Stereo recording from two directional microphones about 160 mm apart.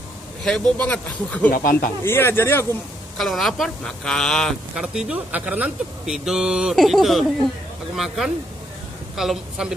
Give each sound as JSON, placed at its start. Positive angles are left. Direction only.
{"t": 0.4, "sound": "speech", "side_deg": 5}
{"t": 1.5, "sound": "speech", "side_deg": 60}
{"t": 2.0, "sound": "speech", "side_deg": 15}
{"t": 3.2, "sound": "speech", "side_deg": 0}